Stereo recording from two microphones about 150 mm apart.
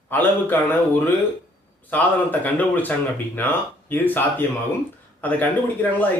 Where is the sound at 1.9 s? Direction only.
10° left (ahead or behind).